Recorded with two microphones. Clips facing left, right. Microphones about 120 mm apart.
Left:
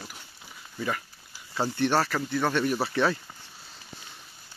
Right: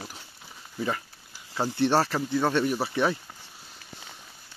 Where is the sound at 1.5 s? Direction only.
20° right (ahead or behind).